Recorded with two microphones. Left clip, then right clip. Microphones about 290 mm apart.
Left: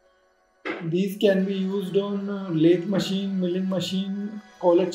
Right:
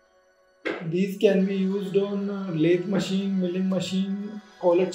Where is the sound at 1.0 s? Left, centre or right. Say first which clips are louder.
Even; left.